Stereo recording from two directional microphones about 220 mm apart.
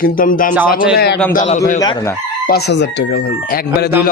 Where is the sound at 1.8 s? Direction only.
15° left (ahead or behind).